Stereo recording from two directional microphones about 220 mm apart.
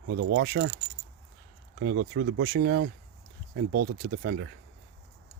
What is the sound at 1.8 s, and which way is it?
Speech, 50° right (ahead or behind).